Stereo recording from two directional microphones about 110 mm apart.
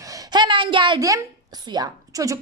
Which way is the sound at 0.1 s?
40° right (ahead or behind).